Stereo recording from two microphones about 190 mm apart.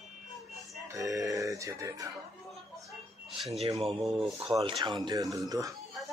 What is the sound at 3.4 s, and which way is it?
Speech, centre (ahead or behind).